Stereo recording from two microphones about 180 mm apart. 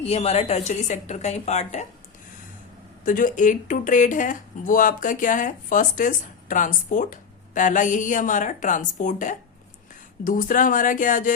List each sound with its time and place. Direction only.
0.0 s speech: 35° left (ahead or behind)
3.0 s speech: 45° left (ahead or behind)